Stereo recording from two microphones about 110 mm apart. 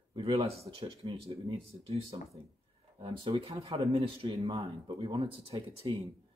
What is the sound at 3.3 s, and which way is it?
Speech, 40° right (ahead or behind).